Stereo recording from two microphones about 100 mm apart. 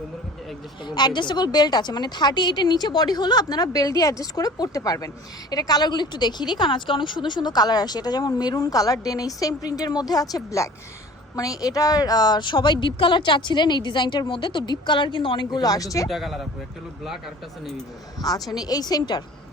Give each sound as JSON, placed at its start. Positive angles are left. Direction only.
{"t": 0.9, "sound": "a woman's voice", "side_deg": 45}
{"t": 16.0, "sound": "speech", "side_deg": 0}
{"t": 18.2, "sound": "a woman's voice", "side_deg": 40}